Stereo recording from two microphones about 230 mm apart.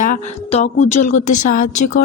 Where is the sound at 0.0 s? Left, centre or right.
Left.